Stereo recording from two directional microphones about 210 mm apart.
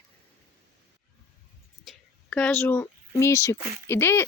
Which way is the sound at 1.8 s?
5° left (ahead or behind).